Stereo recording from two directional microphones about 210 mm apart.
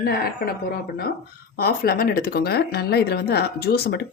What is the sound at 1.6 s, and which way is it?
Speech, 45° left (ahead or behind).